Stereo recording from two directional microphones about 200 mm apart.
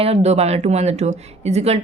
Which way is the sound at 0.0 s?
30° right (ahead or behind).